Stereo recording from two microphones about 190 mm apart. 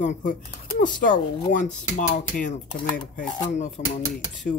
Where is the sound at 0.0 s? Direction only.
40° left (ahead or behind).